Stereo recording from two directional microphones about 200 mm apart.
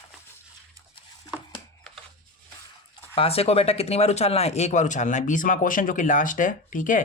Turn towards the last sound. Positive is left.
turn(degrees=40)  # may be behind; listen again after turning